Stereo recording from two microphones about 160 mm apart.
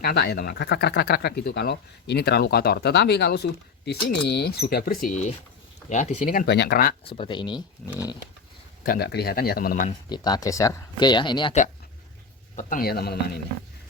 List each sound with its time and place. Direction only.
0.0 s speech: 85° left
7.0 s speech: 30° left (ahead or behind)
8.8 s speech: 75° left (ahead or behind); by 9.9 s 60° left (ahead or behind)
10.1 s speech: 25° left (ahead or behind)
12.5 s speech: 65° left (ahead or behind)